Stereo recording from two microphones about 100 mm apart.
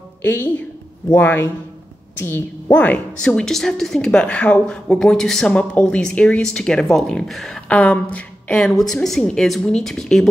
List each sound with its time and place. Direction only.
0.2 s a woman's voice: 20° left (ahead or behind)